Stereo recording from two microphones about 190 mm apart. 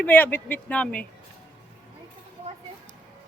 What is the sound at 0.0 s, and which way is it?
Speech, 10° left (ahead or behind).